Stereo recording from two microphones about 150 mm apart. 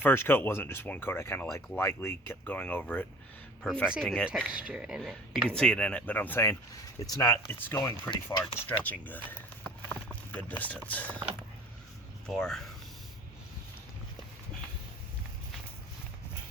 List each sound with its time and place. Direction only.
0.0 s speech: 15° left (ahead or behind)
4.4 s speech: 5° right (ahead or behind); by 8.1 s 20° left (ahead or behind)
8.1 s speech: 30° left (ahead or behind)
8.5 s speech: 10° left (ahead or behind)
9.9 s a sound: 10° left (ahead or behind)
10.6 s speech: 10° left (ahead or behind)
12.2 s speech: 5° left (ahead or behind)